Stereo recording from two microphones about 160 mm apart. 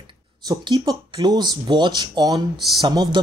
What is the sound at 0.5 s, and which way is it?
Speech, 25° right (ahead or behind).